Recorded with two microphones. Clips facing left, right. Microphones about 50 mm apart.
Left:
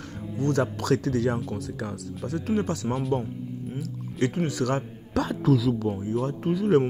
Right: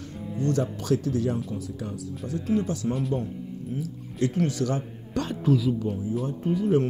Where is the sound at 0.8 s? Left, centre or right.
Left.